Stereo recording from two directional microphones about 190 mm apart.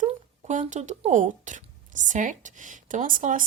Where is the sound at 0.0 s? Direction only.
40° right (ahead or behind).